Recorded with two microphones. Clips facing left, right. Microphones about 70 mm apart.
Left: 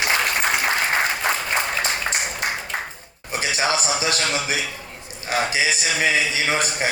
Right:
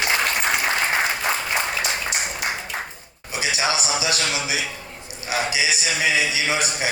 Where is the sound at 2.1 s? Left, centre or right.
Left.